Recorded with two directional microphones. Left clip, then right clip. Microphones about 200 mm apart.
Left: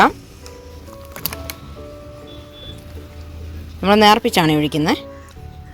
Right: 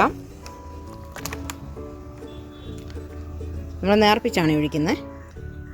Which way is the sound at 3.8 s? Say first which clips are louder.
Left 6 dB; 25° left (ahead or behind).